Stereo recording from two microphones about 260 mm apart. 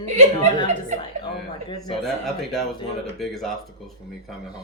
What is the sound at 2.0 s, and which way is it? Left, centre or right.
Speech, centre.